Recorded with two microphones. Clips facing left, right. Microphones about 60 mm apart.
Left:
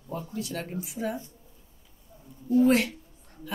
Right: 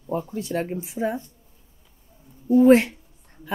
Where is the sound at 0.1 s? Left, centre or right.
Right.